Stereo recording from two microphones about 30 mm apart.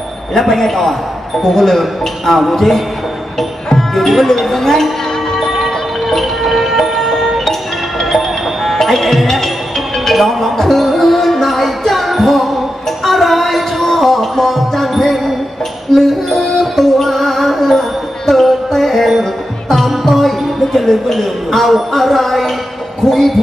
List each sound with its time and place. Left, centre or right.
0.4 s a man's voice: centre
1.8 s a man's voice: centre
6.0 s music: centre
20.9 s a man's voice: centre